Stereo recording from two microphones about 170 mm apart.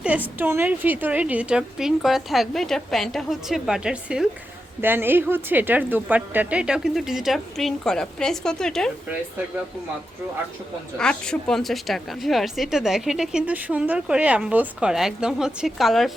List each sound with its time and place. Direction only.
0.0 s a woman's voice: 10° right (ahead or behind)
10.9 s a woman's voice: 5° left (ahead or behind)